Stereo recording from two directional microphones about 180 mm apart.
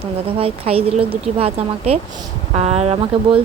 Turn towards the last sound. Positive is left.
turn(degrees=-35)  # may be behind; listen again after turning